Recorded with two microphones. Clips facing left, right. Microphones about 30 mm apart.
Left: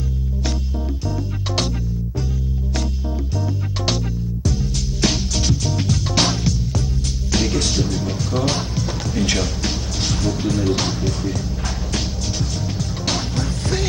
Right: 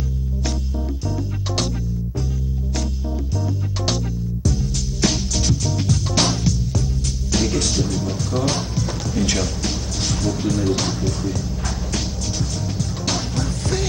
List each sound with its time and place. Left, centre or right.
3.8 s music: centre